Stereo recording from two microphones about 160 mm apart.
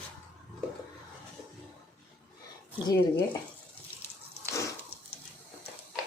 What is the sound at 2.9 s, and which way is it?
Speech, 15° left (ahead or behind).